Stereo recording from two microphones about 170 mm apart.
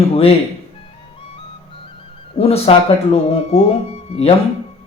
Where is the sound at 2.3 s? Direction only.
35° left (ahead or behind).